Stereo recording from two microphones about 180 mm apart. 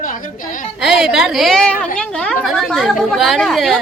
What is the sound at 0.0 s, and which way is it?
Speech, 50° left (ahead or behind).